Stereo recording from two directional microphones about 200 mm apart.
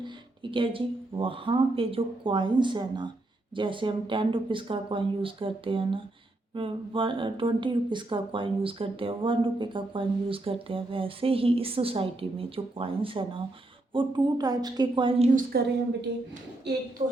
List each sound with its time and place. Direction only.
0.5 s speech: 25° right (ahead or behind)
15.4 s a woman's voice: 50° right (ahead or behind)